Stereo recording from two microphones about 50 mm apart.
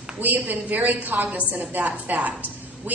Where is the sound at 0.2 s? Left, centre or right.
Right.